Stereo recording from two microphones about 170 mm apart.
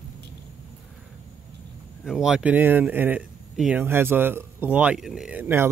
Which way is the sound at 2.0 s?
5° right (ahead or behind).